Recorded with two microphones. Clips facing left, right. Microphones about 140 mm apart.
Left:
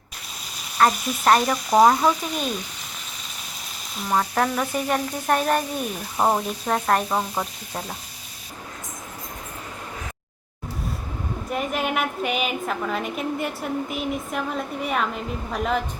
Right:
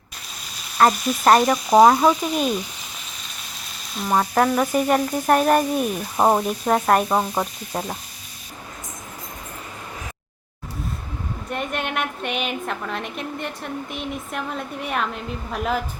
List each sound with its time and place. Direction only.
0.8 s frying: 10° right (ahead or behind)
1.7 s speech: 20° right (ahead or behind)
4.1 s frying: 15° right (ahead or behind)
6.1 s speech: 25° right (ahead or behind)
6.7 s frying: 10° right (ahead or behind)
7.1 s speech: 25° right (ahead or behind)
11.4 s a woman's voice: 5° left (ahead or behind)